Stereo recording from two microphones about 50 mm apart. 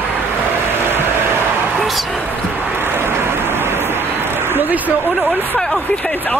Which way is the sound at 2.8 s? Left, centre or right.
Right.